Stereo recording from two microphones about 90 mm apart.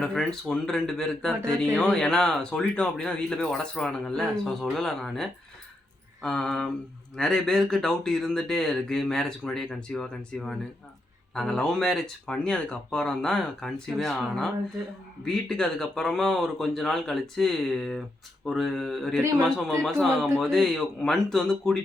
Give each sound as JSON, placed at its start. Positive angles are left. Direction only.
{"t": 0.0, "sound": "speech", "side_deg": 10}